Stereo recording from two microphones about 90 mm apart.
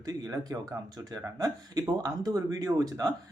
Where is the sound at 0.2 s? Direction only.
40° right (ahead or behind).